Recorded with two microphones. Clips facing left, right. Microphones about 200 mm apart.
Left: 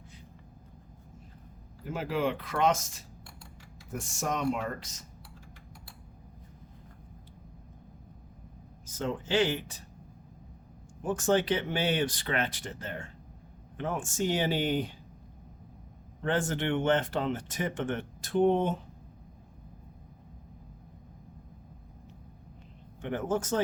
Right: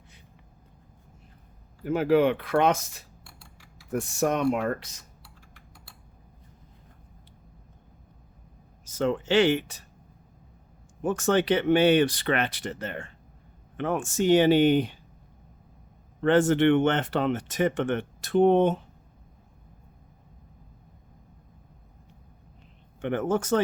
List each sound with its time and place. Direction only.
1.8 s speech: 65° right (ahead or behind)
8.9 s speech: 75° right (ahead or behind)
11.0 s speech: 70° right (ahead or behind)
16.2 s speech: 70° right (ahead or behind)
23.0 s speech: 70° right (ahead or behind)